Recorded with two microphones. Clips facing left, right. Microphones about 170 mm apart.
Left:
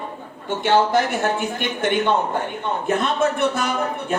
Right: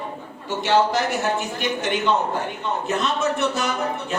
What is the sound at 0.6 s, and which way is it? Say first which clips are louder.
A man's voice: left 2 dB; 55° left (ahead or behind).